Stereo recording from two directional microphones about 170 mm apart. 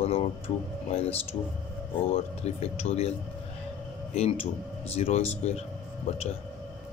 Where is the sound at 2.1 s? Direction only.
35° left (ahead or behind).